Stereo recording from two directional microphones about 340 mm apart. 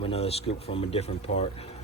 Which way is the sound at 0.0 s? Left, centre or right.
Centre.